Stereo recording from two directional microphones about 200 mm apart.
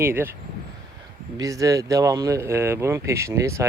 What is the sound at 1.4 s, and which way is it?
Speech, 15° right (ahead or behind).